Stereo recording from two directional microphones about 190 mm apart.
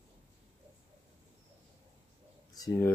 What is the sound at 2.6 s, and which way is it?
Speech, 15° left (ahead or behind).